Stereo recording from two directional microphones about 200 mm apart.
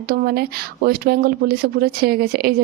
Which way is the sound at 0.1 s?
50° right (ahead or behind).